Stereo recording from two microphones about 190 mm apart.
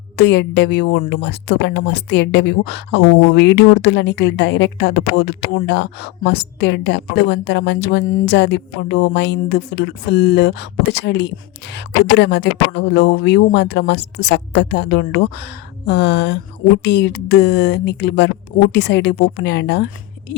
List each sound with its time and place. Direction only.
0.2 s speech: 65° left (ahead or behind)